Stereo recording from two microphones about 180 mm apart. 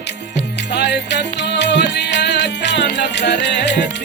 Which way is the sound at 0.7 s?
70° left (ahead or behind).